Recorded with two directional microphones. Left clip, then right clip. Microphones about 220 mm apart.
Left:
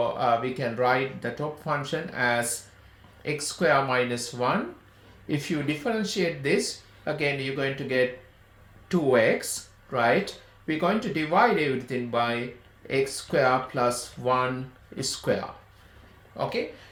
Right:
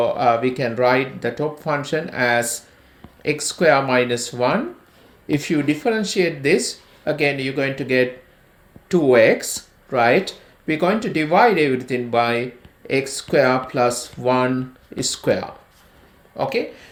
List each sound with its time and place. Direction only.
0.0 s speech: 35° right (ahead or behind)